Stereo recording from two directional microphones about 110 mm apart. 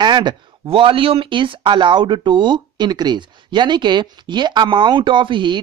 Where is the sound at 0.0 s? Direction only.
45° right (ahead or behind).